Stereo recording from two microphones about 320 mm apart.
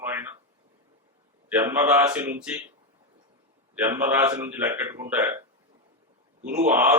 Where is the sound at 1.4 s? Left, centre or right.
Centre.